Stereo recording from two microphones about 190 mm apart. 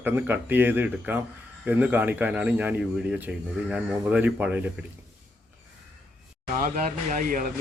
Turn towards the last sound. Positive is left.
turn(degrees=-45)  # may be behind; listen again after turning